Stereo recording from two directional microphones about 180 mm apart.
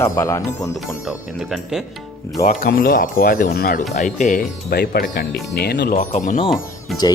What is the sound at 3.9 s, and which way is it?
Speech, 45° left (ahead or behind).